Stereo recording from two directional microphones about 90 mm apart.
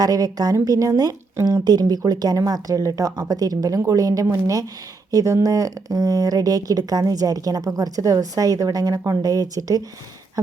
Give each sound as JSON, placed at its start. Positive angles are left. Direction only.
{"t": 0.0, "sound": "a woman's voice", "side_deg": -45}